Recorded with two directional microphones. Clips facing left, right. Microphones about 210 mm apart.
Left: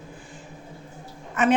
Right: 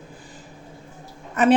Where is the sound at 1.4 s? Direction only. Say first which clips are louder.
Right 4 dB; 35° right (ahead or behind).